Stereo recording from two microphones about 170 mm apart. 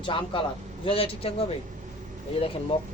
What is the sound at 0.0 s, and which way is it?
Speech, 30° left (ahead or behind).